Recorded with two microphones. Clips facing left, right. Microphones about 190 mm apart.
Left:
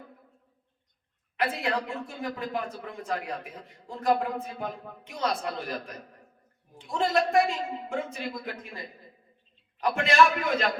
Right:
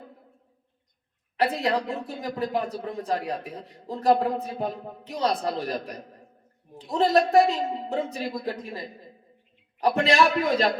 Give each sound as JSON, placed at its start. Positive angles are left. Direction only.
{"t": 1.4, "sound": "speech", "side_deg": -35}
{"t": 9.8, "sound": "speech", "side_deg": -35}